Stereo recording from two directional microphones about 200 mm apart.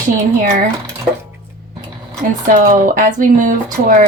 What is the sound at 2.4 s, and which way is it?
Speech, 40° right (ahead or behind).